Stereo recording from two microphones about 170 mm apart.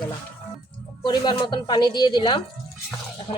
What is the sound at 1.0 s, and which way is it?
Speech, 25° left (ahead or behind).